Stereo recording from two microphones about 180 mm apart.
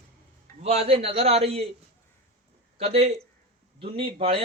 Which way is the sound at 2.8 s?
35° right (ahead or behind).